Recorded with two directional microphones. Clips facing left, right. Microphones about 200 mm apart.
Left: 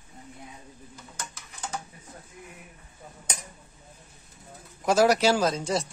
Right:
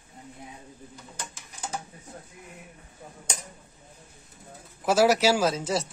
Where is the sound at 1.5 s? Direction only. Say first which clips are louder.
Right 1 dB; 10° right (ahead or behind).